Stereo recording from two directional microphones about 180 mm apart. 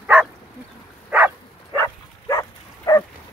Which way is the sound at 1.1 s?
10° right (ahead or behind).